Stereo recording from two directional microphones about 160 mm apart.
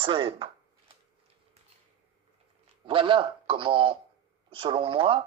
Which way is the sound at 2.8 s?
30° right (ahead or behind).